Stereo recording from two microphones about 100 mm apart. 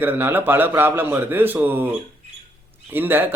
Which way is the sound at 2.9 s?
20° right (ahead or behind).